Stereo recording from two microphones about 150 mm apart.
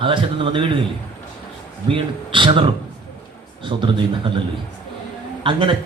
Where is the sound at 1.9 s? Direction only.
35° right (ahead or behind).